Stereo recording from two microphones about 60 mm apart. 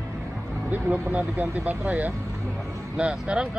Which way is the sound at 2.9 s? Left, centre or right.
Centre.